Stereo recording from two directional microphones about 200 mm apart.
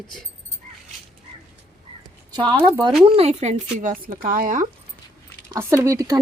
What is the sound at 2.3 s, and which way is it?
Speech, 20° right (ahead or behind).